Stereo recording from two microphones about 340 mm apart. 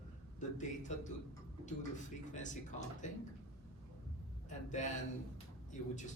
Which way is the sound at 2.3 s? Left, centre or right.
Left.